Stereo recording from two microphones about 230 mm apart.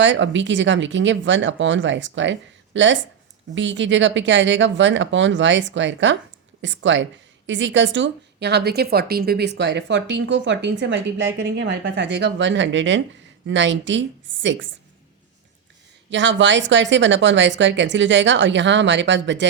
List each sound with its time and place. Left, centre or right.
0.0 s a woman's voice: right
16.0 s a woman's voice: right